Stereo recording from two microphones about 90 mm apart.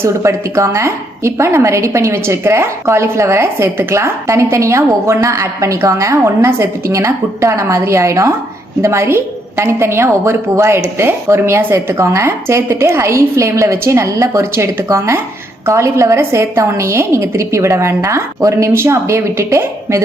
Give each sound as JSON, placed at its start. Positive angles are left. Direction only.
{"t": 0.0, "sound": "a woman's voice", "side_deg": -35}